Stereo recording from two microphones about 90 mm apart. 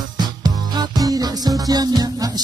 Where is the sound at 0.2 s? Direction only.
50° right (ahead or behind).